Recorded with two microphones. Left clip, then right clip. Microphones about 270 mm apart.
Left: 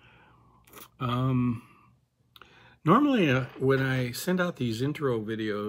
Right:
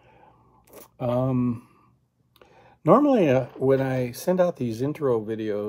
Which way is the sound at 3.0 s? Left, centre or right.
Centre.